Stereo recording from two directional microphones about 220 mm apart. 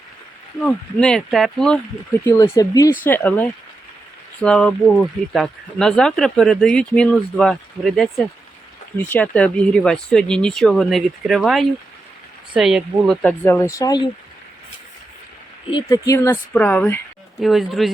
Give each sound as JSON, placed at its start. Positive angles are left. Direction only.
{"t": 0.6, "sound": "speech", "side_deg": 5}
{"t": 2.2, "sound": "speech", "side_deg": 15}
{"t": 15.7, "sound": "speech", "side_deg": 15}